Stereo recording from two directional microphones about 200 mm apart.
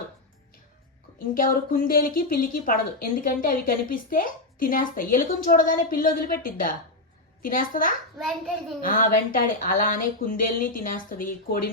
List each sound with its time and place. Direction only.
1.3 s a woman's voice: 45° left (ahead or behind)